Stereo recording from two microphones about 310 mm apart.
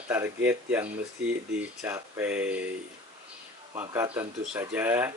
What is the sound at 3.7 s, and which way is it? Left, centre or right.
Speech, centre.